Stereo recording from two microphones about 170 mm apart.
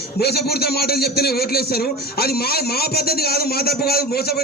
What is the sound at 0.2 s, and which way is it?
A man's voice, 70° left (ahead or behind).